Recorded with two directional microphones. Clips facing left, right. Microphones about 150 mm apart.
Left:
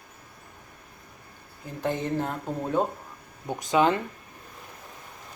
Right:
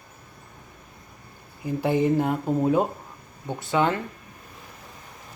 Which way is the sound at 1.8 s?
10° right (ahead or behind).